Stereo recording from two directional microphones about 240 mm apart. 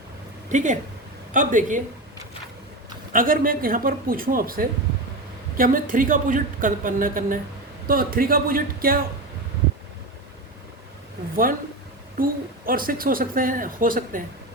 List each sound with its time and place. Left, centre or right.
0.5 s a woman's voice: right
3.1 s a woman's voice: right
12.1 s a woman's voice: right